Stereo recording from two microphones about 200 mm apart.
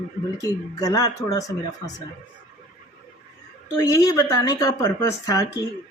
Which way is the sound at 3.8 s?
15° left (ahead or behind).